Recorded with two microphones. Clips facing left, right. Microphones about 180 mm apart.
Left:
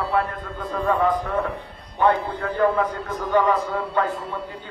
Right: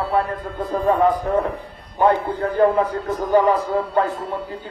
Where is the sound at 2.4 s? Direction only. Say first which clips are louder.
Right 4 dB; 30° right (ahead or behind).